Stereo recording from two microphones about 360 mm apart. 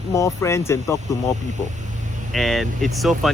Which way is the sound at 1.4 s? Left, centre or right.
Centre.